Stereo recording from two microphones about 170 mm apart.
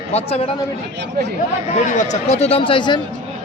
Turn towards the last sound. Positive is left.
turn(degrees=25)  # may be behind; listen again after turning